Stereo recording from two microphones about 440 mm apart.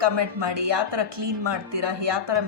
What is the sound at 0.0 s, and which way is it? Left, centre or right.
Speech, right.